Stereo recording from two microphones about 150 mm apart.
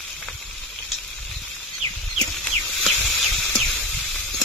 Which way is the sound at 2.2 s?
5° left (ahead or behind).